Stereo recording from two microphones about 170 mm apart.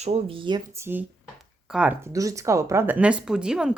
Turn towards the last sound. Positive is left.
turn(degrees=-5)  # may be behind; listen again after turning